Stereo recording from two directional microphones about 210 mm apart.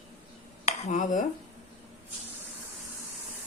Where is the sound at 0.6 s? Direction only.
35° left (ahead or behind).